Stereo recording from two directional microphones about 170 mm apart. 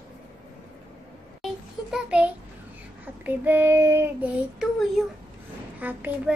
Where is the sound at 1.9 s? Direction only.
5° right (ahead or behind).